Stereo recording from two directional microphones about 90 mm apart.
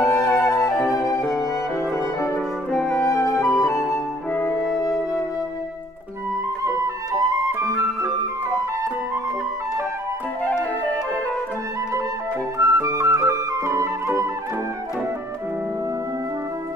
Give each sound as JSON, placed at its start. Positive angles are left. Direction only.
{"t": 0.0, "sound": "flute", "side_deg": 30}
{"t": 3.0, "sound": "music", "side_deg": 35}
{"t": 3.4, "sound": "flute", "side_deg": 35}
{"t": 4.3, "sound": "music", "side_deg": 20}
{"t": 6.6, "sound": "flute", "side_deg": -35}
{"t": 12.5, "sound": "flute", "side_deg": -35}